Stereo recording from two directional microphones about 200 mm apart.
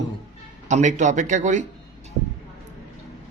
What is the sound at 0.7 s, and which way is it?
Speech, 35° right (ahead or behind).